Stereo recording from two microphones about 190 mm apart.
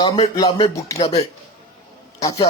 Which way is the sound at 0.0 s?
20° left (ahead or behind).